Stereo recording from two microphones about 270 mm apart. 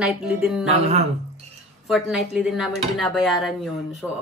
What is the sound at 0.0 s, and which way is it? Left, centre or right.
Speech, centre.